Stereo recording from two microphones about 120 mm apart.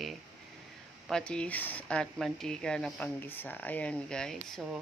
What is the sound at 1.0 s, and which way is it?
Speech, 5° left (ahead or behind).